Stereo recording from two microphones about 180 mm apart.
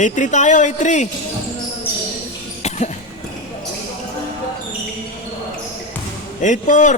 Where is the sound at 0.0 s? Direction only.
40° left (ahead or behind).